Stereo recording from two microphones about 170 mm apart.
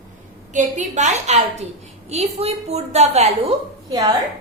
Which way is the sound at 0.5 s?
45° right (ahead or behind).